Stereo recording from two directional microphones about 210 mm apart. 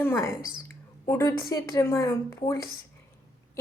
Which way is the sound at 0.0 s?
10° left (ahead or behind).